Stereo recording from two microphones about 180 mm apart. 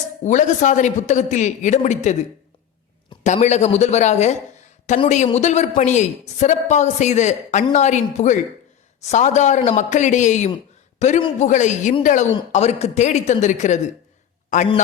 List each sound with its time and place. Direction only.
0.3 s speech: 45° left (ahead or behind)
3.2 s a woman's voice: 40° left (ahead or behind)